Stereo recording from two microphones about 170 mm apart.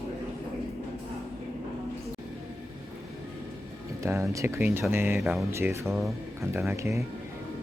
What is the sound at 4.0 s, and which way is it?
Music, 15° right (ahead or behind).